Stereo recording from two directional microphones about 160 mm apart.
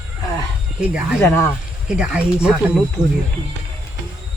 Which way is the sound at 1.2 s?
20° left (ahead or behind).